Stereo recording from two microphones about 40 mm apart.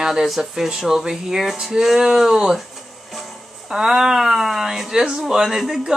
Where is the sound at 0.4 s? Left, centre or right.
Centre.